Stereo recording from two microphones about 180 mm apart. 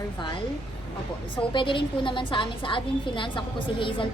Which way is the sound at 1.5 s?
30° left (ahead or behind).